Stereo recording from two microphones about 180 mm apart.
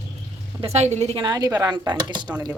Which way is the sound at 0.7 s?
40° right (ahead or behind).